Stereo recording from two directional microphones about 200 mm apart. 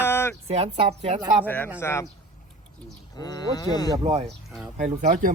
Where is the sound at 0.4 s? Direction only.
30° right (ahead or behind).